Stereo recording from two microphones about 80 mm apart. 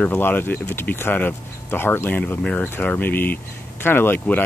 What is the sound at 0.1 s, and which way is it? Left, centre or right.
Speech, left.